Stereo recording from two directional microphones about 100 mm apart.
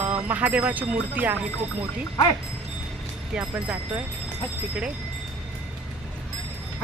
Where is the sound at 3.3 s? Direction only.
10° right (ahead or behind).